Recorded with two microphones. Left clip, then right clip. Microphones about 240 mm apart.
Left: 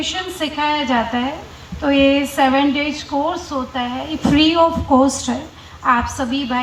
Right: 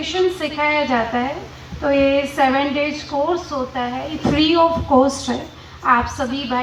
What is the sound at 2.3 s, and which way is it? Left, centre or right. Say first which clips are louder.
A woman's voice: left 1 dB; left.